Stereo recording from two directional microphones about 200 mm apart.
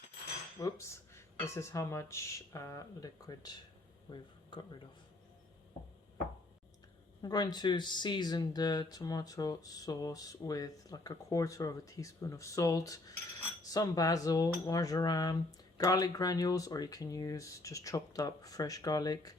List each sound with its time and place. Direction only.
0.6 s speech: 15° left (ahead or behind)
7.2 s speech: 20° left (ahead or behind)